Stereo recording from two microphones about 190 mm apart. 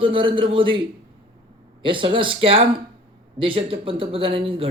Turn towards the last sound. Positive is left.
turn(degrees=-30)  # may be behind; listen again after turning